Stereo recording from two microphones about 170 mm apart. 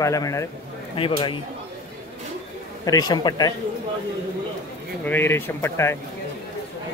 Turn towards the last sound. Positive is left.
turn(degrees=15)  # may be behind; listen again after turning